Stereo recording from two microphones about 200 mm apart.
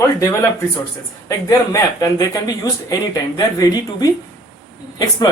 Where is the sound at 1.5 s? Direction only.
15° left (ahead or behind).